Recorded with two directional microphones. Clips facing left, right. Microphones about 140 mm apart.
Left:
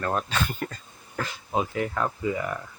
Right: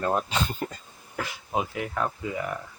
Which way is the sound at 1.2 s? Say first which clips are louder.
Left 1 dB; 10° right (ahead or behind).